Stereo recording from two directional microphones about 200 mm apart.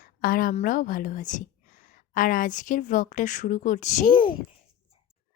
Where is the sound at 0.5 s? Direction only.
45° left (ahead or behind).